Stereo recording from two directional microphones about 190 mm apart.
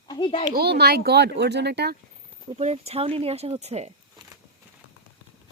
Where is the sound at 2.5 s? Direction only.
35° right (ahead or behind).